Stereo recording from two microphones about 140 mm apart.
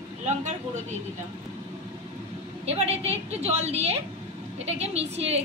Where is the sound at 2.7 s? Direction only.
50° right (ahead or behind).